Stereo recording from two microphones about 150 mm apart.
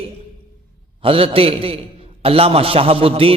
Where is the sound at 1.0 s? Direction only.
40° right (ahead or behind).